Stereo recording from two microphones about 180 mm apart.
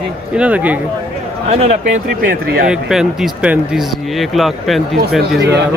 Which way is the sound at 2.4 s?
60° right (ahead or behind).